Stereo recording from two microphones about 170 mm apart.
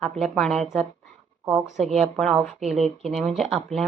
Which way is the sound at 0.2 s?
Centre (ahead or behind).